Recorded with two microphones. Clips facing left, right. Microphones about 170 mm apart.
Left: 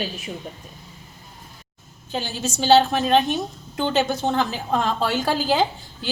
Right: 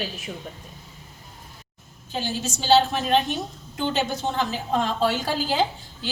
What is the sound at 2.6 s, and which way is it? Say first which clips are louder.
A woman's voice: left 3 dB; 60° left (ahead or behind).